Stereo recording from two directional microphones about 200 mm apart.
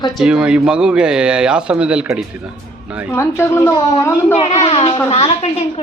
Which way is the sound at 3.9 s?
30° left (ahead or behind).